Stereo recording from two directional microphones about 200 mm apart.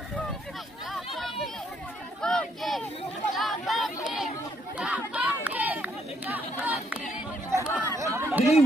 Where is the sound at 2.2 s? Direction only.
5° left (ahead or behind).